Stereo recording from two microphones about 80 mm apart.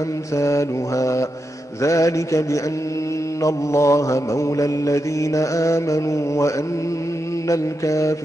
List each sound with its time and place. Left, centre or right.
0.4 s mantra: left